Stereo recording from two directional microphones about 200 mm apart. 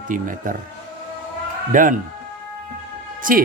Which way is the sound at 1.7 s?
40° right (ahead or behind).